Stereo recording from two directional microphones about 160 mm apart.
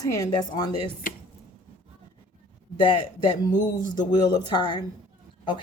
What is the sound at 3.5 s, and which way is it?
Speech, 25° left (ahead or behind).